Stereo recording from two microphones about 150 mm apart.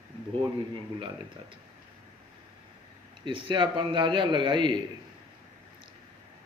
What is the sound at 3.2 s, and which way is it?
A man's voice, 35° right (ahead or behind).